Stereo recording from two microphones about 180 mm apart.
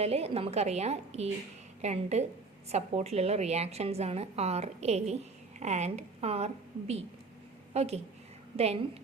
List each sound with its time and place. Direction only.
0.0 s a woman's voice: 35° right (ahead or behind)